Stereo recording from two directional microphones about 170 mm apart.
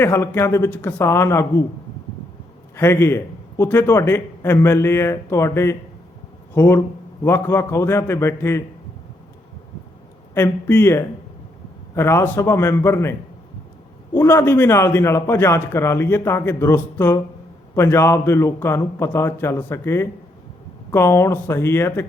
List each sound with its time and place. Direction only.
0.0 s a man's voice: 15° left (ahead or behind)
2.7 s a man's voice: 15° left (ahead or behind)
10.3 s a man's voice: 10° left (ahead or behind)